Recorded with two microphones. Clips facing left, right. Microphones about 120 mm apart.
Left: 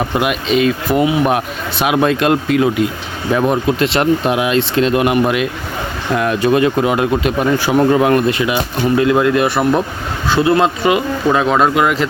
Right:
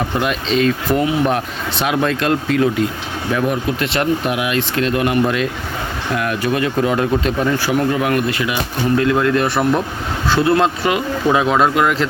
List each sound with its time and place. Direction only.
0.2 s speech: 10° left (ahead or behind)
7.7 s speech: 30° left (ahead or behind); by 12.0 s 5° left (ahead or behind)